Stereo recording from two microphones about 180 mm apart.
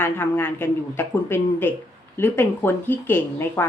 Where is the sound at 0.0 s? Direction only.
10° left (ahead or behind).